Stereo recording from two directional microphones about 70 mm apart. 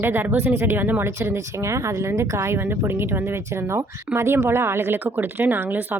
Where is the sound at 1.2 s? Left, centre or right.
Right.